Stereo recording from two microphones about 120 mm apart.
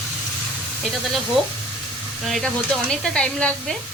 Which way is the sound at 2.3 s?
5° left (ahead or behind).